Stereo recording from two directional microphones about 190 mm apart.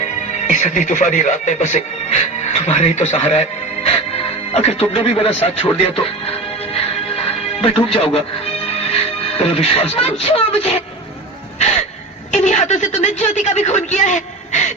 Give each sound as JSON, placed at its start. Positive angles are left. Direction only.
{"t": 0.0, "sound": "speech", "side_deg": 40}
{"t": 6.7, "sound": "music", "side_deg": 30}
{"t": 8.9, "sound": "speech", "side_deg": 30}
{"t": 12.3, "sound": "a sound", "side_deg": 40}